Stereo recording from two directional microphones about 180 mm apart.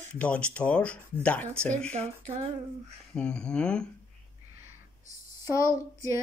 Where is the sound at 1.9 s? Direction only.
35° right (ahead or behind).